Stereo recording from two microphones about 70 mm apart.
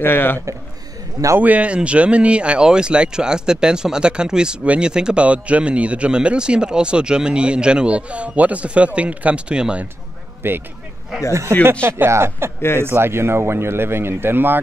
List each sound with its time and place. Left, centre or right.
0.0 s a man's voice: left
1.4 s speech: centre
10.4 s speech: right
11.8 s speech: right